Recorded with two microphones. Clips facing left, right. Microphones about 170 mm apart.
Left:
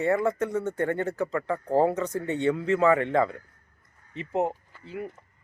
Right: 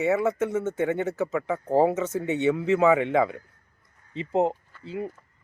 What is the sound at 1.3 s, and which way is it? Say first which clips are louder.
Speech: right 1 dB; 5° right (ahead or behind).